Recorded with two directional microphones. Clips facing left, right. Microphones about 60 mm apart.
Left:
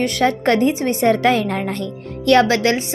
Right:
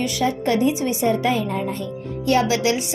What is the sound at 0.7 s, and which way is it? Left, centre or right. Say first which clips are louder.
A woman's voice: left 4 dB; left.